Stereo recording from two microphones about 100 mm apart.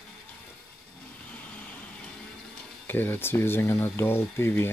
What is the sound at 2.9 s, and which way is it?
Speech, 20° left (ahead or behind).